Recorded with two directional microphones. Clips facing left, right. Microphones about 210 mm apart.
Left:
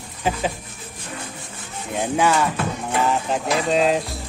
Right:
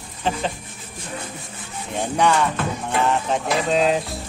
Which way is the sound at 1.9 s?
5° left (ahead or behind).